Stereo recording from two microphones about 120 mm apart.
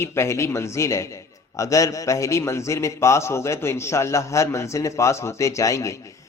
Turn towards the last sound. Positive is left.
turn(degrees=25)  # may be behind; listen again after turning